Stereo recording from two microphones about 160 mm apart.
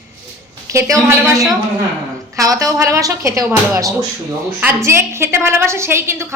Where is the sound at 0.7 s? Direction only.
20° right (ahead or behind).